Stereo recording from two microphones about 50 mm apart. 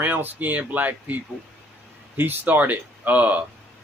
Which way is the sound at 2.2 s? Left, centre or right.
Right.